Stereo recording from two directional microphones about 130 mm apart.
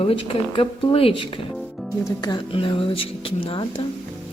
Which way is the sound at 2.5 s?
40° left (ahead or behind).